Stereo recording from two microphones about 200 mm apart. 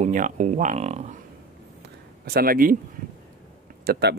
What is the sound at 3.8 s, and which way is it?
Speech, 50° right (ahead or behind).